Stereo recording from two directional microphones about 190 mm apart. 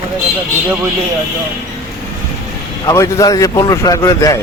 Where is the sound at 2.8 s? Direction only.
15° left (ahead or behind).